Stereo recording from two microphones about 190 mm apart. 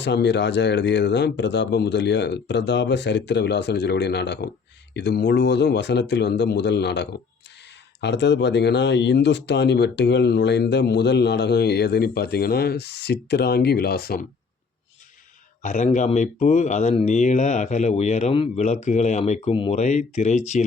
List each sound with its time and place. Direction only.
0.0 s speech: 65° left (ahead or behind)
15.6 s speech: 40° left (ahead or behind)